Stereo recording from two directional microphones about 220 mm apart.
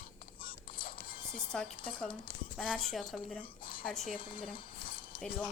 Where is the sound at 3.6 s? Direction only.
40° left (ahead or behind).